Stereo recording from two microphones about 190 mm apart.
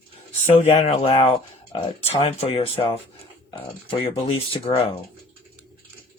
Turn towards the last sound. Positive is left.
turn(degrees=30)  # may be behind; listen again after turning